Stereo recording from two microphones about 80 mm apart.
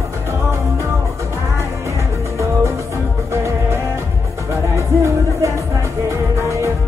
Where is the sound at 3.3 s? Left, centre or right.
Right.